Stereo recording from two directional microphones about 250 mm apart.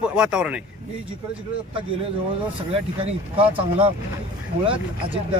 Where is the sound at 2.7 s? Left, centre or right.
Right.